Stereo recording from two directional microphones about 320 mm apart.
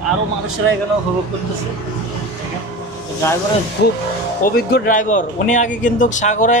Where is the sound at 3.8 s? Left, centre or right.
Left.